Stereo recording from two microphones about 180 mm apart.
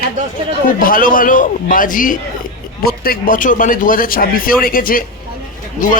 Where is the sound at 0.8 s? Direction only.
50° left (ahead or behind).